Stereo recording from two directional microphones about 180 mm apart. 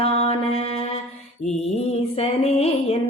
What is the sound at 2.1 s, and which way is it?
Music, 35° left (ahead or behind).